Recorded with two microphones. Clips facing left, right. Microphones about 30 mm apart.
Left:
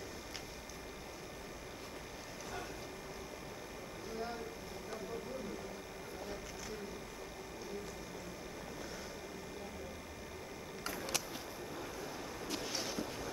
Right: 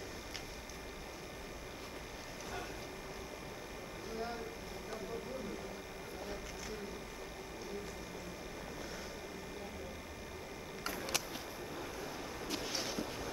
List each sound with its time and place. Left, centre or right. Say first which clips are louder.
10.8 s camera: right 1 dB; centre
12.4 s boat: right 1 dB; centre